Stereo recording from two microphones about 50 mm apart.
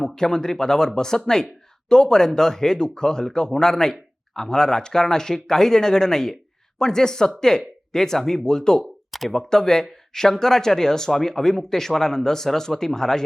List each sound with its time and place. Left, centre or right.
0.0 s speech: centre
8.8 s a sound: centre
9.5 s speech: centre